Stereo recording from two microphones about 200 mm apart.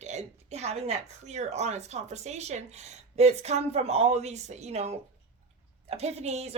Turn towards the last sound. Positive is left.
turn(degrees=-30)  # may be behind; listen again after turning